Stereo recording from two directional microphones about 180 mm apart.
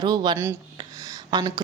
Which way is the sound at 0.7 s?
25° right (ahead or behind).